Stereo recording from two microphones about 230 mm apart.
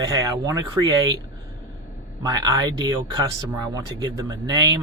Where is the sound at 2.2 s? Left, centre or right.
Centre.